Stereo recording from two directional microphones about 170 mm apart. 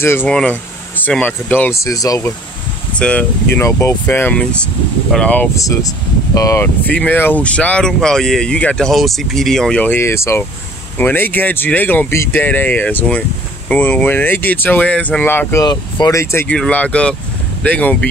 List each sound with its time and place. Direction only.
0.0 s speech: 10° left (ahead or behind)
3.0 s speech: 5° left (ahead or behind)
5.6 s speech: 20° left (ahead or behind)